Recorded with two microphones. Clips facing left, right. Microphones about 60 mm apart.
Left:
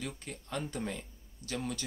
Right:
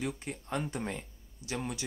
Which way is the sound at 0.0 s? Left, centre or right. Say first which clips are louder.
Right 5 dB; right.